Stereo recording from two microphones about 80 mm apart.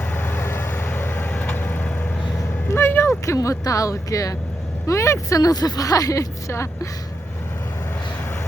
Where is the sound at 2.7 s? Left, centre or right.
Left.